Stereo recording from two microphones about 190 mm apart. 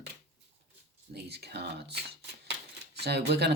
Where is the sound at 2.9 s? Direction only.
60° right (ahead or behind).